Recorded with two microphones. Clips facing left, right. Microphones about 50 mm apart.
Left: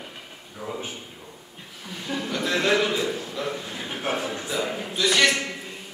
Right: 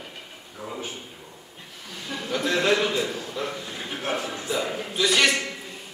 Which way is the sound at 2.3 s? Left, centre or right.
Centre.